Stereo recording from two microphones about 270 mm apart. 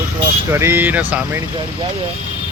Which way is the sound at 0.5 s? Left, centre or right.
Centre.